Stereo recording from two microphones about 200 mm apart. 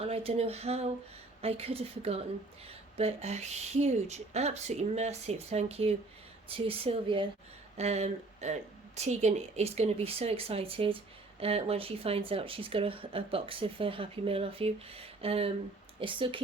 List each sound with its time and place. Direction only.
0.0 s speech: 30° right (ahead or behind)